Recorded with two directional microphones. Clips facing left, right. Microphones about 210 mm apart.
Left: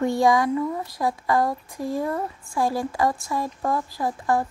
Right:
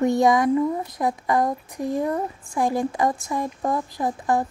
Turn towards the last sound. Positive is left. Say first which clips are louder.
# right 1 dB
turn(degrees=-20)  # may be behind; listen again after turning